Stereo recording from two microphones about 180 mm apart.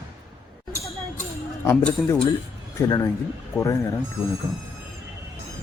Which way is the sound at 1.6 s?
15° left (ahead or behind).